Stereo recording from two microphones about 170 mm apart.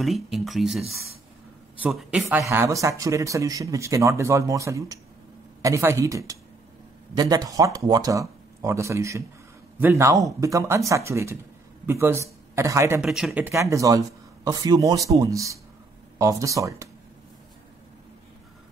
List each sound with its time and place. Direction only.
0.0 s a man's voice: centre (ahead or behind); by 13.0 s 15° right (ahead or behind)
13.0 s speech: 5° right (ahead or behind); by 16.9 s 20° right (ahead or behind)